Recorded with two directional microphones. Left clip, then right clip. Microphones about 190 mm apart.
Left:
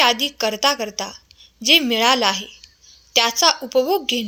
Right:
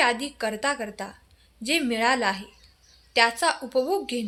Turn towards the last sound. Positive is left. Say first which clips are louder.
# left 7 dB
turn(degrees=30)  # may be behind; listen again after turning